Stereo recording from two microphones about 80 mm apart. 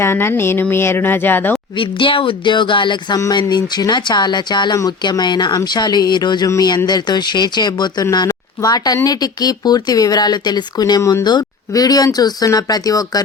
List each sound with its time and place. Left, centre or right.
0.0 s speech: left
1.8 s speech: left
3.3 s speech: left
8.3 s speech: left